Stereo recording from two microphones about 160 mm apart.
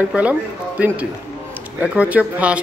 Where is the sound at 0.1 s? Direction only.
10° right (ahead or behind).